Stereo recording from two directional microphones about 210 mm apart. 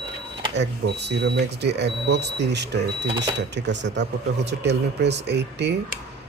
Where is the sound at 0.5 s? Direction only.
55° right (ahead or behind).